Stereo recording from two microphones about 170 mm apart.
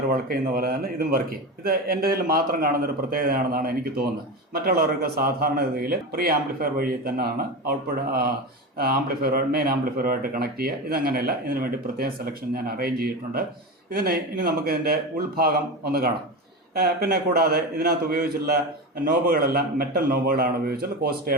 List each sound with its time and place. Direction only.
0.1 s speech: 60° right (ahead or behind)
8.8 s speech: 60° right (ahead or behind)